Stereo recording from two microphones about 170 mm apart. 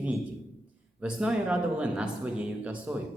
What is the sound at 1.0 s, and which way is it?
Speech, 5° right (ahead or behind).